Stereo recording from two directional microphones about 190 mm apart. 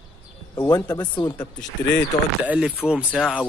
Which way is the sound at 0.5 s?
20° left (ahead or behind).